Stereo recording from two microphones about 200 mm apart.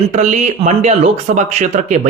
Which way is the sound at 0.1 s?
35° right (ahead or behind).